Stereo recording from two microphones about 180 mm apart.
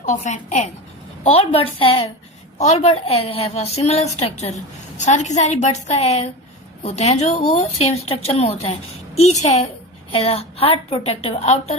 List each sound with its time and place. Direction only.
0.0 s a woman's voice: 45° left (ahead or behind)